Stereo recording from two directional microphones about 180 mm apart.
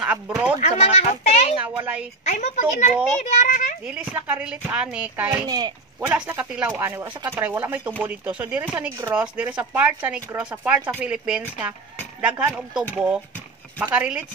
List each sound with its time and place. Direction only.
0.0 s speech: 5° right (ahead or behind)
0.6 s children playing: 35° left (ahead or behind)
1.6 s a sound: 10° right (ahead or behind)
2.2 s a woman's voice: 40° left (ahead or behind)
3.8 s speech: 5° right (ahead or behind)
5.5 s speech: 20° right (ahead or behind)
6.1 s speech: 5° right (ahead or behind)
13.9 s speech: 5° right (ahead or behind)